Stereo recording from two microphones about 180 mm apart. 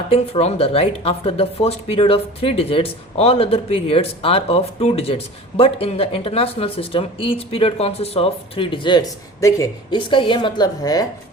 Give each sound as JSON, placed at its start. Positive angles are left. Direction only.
{"t": 0.1, "sound": "speech", "side_deg": 35}